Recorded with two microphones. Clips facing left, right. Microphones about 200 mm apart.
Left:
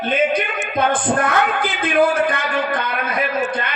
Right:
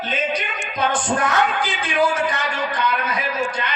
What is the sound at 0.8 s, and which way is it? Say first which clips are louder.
A woman's voice: left 3 dB; 55° left (ahead or behind).